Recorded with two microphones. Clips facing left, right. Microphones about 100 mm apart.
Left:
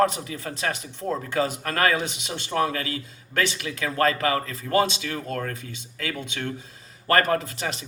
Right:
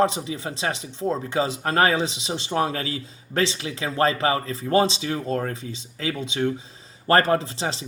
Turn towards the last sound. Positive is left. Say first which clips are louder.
# right 3 dB
turn(degrees=-30)  # may be behind; listen again after turning